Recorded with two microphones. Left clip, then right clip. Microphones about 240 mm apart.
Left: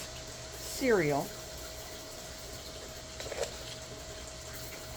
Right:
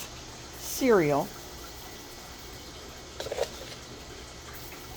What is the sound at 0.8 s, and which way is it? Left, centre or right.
Speech, right.